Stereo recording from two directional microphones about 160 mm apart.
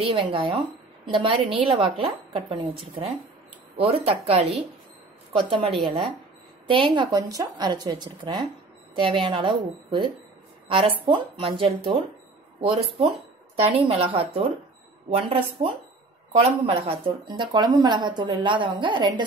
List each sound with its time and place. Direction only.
0.0 s a woman's voice: 35° right (ahead or behind)
3.7 s a woman's voice: 35° right (ahead or behind)
13.6 s a woman's voice: 40° right (ahead or behind)